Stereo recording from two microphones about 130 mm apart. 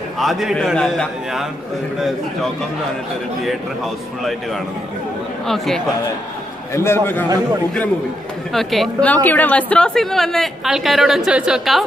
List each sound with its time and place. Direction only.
0.2 s a woman's voice: centre (ahead or behind)
6.7 s a man's voice: 20° left (ahead or behind)
8.5 s a woman's voice: centre (ahead or behind)
9.0 s a woman's voice: 10° left (ahead or behind); by 11.8 s 5° right (ahead or behind)